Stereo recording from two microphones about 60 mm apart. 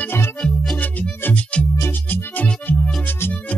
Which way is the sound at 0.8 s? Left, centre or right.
Left.